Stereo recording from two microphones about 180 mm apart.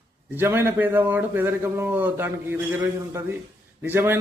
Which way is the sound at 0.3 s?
10° right (ahead or behind).